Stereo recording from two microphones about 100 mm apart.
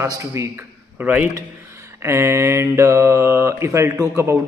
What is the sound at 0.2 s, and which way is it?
Mantra, 30° right (ahead or behind).